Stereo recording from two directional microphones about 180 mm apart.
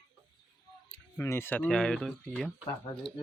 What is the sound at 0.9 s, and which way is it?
Speech, 15° left (ahead or behind).